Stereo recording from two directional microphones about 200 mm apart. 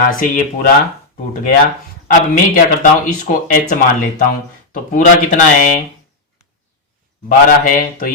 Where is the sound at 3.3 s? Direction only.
45° left (ahead or behind).